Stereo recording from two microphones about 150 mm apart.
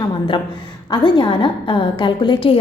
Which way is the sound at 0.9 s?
30° left (ahead or behind).